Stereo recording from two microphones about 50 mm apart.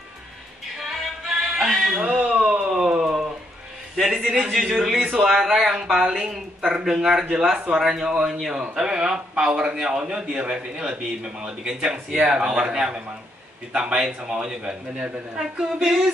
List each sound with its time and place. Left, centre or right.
0.7 s music: centre
2.0 s a sound: centre
4.0 s a man's voice: centre
5.8 s a man's voice: centre
13.9 s a man's voice: centre